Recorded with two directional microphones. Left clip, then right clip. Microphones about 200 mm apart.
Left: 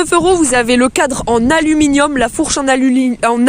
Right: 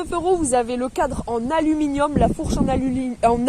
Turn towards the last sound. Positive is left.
turn(degrees=25)  # may be behind; listen again after turning